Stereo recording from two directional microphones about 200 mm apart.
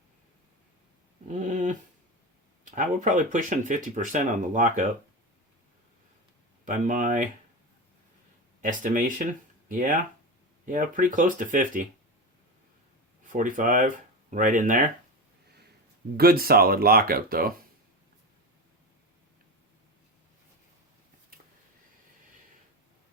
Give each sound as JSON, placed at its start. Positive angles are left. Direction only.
{"t": 1.3, "sound": "a sound", "side_deg": -40}
{"t": 2.6, "sound": "speech", "side_deg": -40}
{"t": 6.7, "sound": "speech", "side_deg": -40}
{"t": 8.6, "sound": "speech", "side_deg": -40}
{"t": 13.2, "sound": "speech", "side_deg": -40}
{"t": 16.1, "sound": "speech", "side_deg": -50}